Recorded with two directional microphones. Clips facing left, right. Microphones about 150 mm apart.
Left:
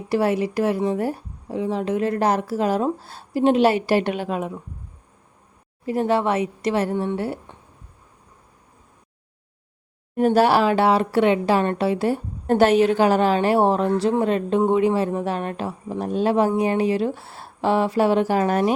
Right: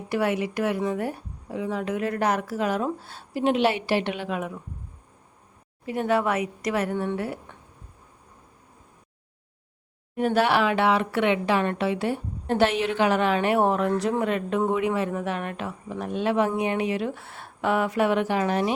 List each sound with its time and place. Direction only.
0.1 s speech: 35° left (ahead or behind)
5.8 s speech: 35° left (ahead or behind)
10.2 s speech: 40° left (ahead or behind)